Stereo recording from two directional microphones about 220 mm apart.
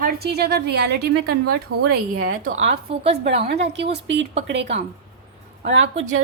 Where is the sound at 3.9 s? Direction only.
55° right (ahead or behind).